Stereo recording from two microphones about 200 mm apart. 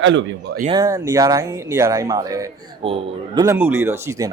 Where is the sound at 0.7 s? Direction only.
15° right (ahead or behind).